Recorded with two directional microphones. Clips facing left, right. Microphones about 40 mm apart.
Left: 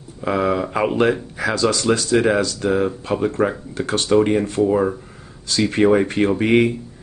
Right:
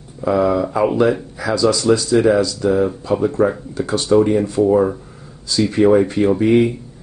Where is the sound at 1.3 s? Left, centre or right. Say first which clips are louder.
Right 3 dB; left.